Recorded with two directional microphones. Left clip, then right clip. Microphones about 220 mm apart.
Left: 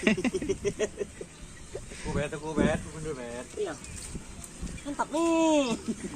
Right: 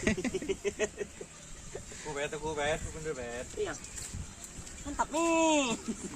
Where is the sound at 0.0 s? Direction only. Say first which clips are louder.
Left 5 dB; centre (ahead or behind).